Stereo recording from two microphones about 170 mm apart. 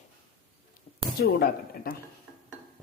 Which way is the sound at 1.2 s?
60° left (ahead or behind).